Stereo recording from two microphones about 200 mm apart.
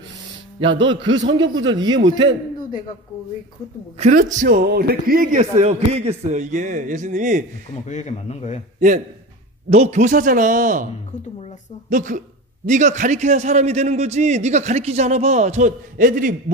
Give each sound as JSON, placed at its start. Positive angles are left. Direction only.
{"t": 0.7, "sound": "a man's voice", "side_deg": -65}
{"t": 2.0, "sound": "a man's voice", "side_deg": -25}
{"t": 4.0, "sound": "a man's voice", "side_deg": -40}
{"t": 4.5, "sound": "a man's voice", "side_deg": -50}
{"t": 7.9, "sound": "speech", "side_deg": 35}
{"t": 8.7, "sound": "a man's voice", "side_deg": -40}
{"t": 11.9, "sound": "a man's voice", "side_deg": -40}